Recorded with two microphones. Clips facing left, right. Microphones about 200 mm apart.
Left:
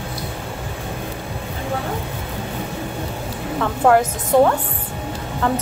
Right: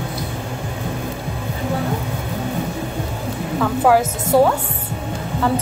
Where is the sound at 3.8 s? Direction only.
5° right (ahead or behind).